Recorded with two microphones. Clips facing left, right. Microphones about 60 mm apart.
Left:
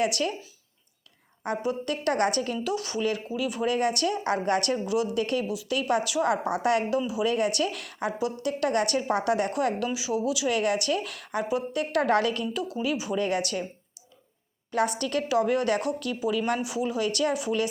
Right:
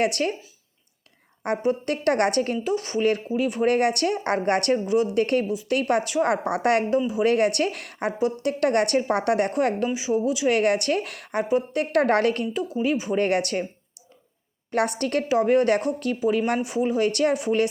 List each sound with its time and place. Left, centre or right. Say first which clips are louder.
0.0 s a woman's voice: right 3 dB; right
1.5 s a woman's voice: right 5 dB; right
2.6 s a woman's voice: right 5 dB; right
6.3 s a woman's voice: right 3 dB; right
9.8 s speech: right 4 dB; right
10.5 s a woman's voice: right 5 dB; right
14.7 s speech: right 3 dB; right